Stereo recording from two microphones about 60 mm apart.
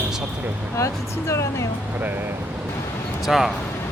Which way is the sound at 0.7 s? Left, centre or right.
Left.